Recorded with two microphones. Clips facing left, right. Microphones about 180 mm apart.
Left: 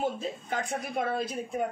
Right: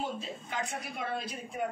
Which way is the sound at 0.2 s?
45° left (ahead or behind).